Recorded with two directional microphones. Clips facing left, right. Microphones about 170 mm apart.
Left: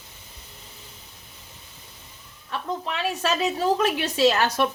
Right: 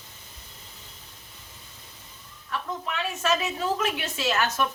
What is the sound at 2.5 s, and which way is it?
A woman's voice, 30° left (ahead or behind).